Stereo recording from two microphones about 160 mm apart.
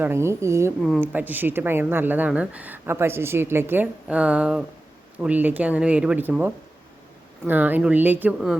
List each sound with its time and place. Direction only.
0.0 s speech: 15° right (ahead or behind)